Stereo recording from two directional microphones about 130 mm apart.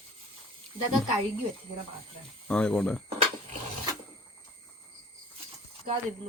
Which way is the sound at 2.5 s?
5° left (ahead or behind).